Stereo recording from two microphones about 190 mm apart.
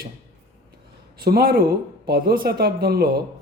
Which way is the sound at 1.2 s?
50° right (ahead or behind).